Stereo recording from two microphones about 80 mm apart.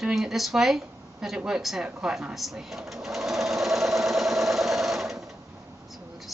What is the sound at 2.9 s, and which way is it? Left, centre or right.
Sewing machine, centre.